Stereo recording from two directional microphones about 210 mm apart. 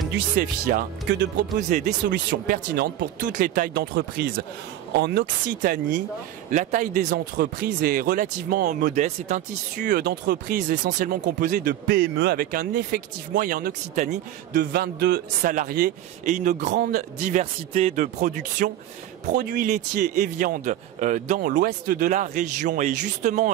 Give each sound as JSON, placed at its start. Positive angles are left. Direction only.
{"t": 0.4, "sound": "a man's voice", "side_deg": -45}
{"t": 14.5, "sound": "a man's voice", "side_deg": -50}